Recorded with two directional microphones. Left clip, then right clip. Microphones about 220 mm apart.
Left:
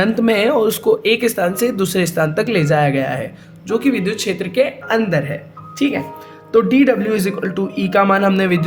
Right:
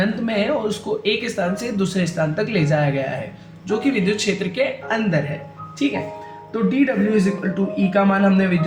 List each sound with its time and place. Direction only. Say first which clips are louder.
0.0 s speech: left 7 dB; 45° left (ahead or behind)
6.5 s speech: left 7 dB; 50° left (ahead or behind)